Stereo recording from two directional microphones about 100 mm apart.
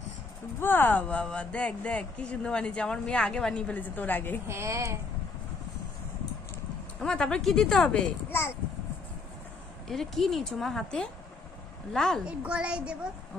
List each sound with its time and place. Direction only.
0.6 s speech: 20° left (ahead or behind)
4.5 s a woman's voice: 30° right (ahead or behind)
7.0 s speech: 5° left (ahead or behind)
9.8 s speech: 5° left (ahead or behind)
12.3 s a woman's voice: 10° right (ahead or behind)